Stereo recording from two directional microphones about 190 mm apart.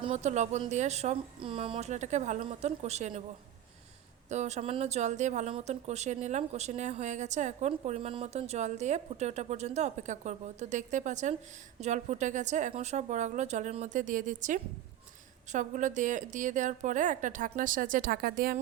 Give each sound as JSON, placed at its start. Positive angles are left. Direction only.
{"t": 0.0, "sound": "speech", "side_deg": -35}
{"t": 4.3, "sound": "speech", "side_deg": -35}